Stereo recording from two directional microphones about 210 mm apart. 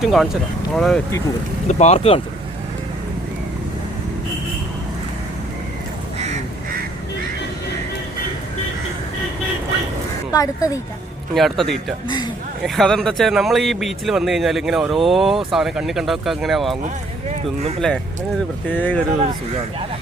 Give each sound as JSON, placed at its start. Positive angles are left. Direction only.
{"t": 0.0, "sound": "speech", "side_deg": 0}
{"t": 1.6, "sound": "speech", "side_deg": 30}
{"t": 10.3, "sound": "speech", "side_deg": 15}
{"t": 11.3, "sound": "speech", "side_deg": 0}
{"t": 12.0, "sound": "a man's voice", "side_deg": 20}
{"t": 12.6, "sound": "speech", "side_deg": 0}
{"t": 17.7, "sound": "speech", "side_deg": 5}